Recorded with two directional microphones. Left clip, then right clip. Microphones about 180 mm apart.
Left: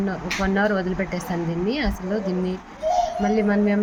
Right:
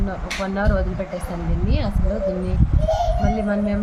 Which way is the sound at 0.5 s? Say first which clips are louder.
Left 1 dB; 15° left (ahead or behind).